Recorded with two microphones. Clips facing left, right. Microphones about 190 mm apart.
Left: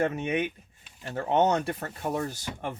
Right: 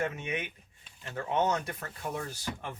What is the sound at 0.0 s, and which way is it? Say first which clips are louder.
Speech: left 7 dB; 35° left (ahead or behind).